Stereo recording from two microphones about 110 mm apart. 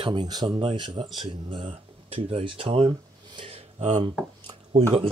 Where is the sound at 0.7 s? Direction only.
50° right (ahead or behind).